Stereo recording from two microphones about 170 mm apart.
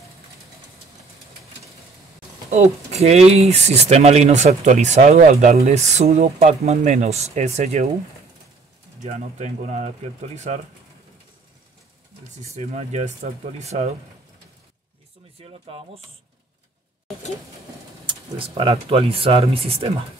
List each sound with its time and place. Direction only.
2.5 s speech: 40° right (ahead or behind)
9.0 s speech: 45° right (ahead or behind)
12.3 s speech: 45° right (ahead or behind)
15.3 s speech: 35° right (ahead or behind)
18.0 s speech: 30° right (ahead or behind)